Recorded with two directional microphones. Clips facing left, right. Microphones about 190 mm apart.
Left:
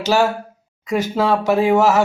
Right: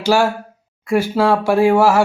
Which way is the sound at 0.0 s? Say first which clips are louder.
Right 1 dB; 10° right (ahead or behind).